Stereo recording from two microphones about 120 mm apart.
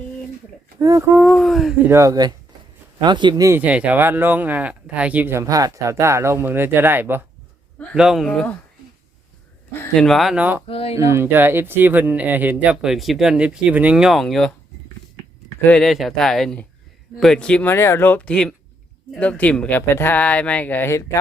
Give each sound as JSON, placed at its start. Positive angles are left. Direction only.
{"t": 0.8, "sound": "speech", "side_deg": -30}
{"t": 1.2, "sound": "speech", "side_deg": 0}
{"t": 1.9, "sound": "speech", "side_deg": -25}
{"t": 3.6, "sound": "speech", "side_deg": -10}
{"t": 7.9, "sound": "speech", "side_deg": -5}
{"t": 9.9, "sound": "speech", "side_deg": 5}
{"t": 10.3, "sound": "speech", "side_deg": -15}
{"t": 10.7, "sound": "speech", "side_deg": 55}
{"t": 10.9, "sound": "speech", "side_deg": -25}
{"t": 15.8, "sound": "speech", "side_deg": 0}
{"t": 17.7, "sound": "speech", "side_deg": 20}